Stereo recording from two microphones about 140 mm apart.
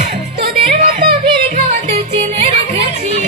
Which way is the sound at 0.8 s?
50° right (ahead or behind).